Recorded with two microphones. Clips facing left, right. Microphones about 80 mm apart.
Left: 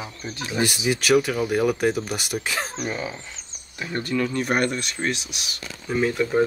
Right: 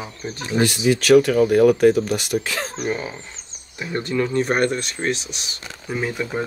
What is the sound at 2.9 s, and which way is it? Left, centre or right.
Speech, right.